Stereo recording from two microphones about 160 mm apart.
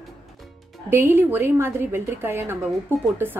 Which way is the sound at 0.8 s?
15° right (ahead or behind).